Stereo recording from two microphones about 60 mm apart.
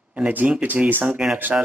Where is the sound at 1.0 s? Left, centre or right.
Centre.